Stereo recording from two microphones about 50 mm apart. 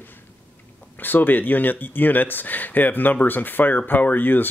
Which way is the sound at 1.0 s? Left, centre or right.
Left.